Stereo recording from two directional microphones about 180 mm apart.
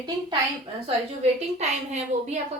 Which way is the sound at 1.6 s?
35° right (ahead or behind).